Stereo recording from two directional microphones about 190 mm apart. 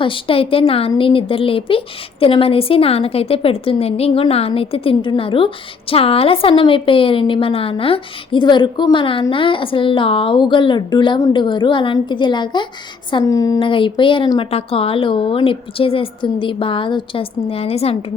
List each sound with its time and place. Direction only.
0.0 s a woman's voice: 25° left (ahead or behind)